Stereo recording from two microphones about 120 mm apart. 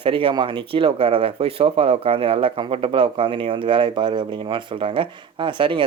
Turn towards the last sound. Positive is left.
turn(degrees=-45)  # may be behind; listen again after turning